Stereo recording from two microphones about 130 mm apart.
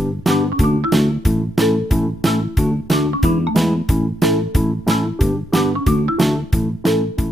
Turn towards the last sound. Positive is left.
turn(degrees=0)  # may be behind; listen again after turning